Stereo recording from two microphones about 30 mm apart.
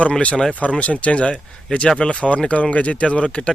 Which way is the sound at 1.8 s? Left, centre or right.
Left.